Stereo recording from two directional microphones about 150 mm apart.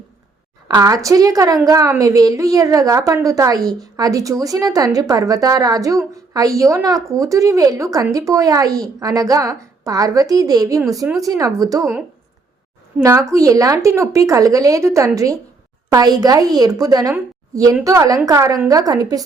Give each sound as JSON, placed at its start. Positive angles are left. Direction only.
{"t": 0.7, "sound": "a woman's voice", "side_deg": -25}
{"t": 13.0, "sound": "a woman's voice", "side_deg": -20}